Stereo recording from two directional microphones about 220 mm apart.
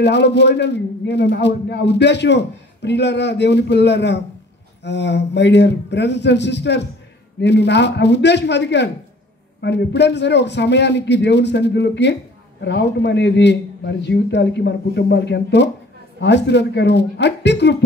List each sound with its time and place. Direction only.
0.0 s a man's voice: 50° left (ahead or behind)